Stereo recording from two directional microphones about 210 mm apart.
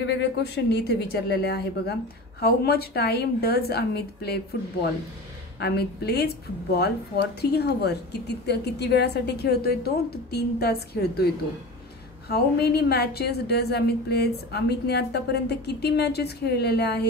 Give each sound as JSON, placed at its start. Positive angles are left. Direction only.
{"t": 0.0, "sound": "a woman's voice", "side_deg": 55}
{"t": 5.6, "sound": "a woman's voice", "side_deg": 50}
{"t": 12.3, "sound": "a woman's voice", "side_deg": 50}